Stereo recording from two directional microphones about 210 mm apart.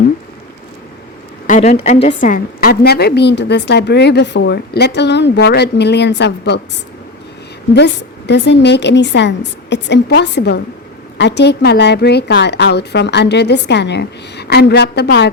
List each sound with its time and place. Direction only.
1.5 s a woman's voice: 35° left (ahead or behind); by 6.6 s 55° left (ahead or behind)
7.7 s a woman's voice: 55° left (ahead or behind)